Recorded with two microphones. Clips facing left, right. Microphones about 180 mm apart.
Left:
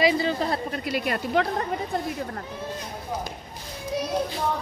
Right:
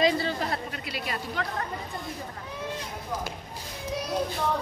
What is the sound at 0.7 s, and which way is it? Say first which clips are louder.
Speech: left 7 dB; 45° left (ahead or behind).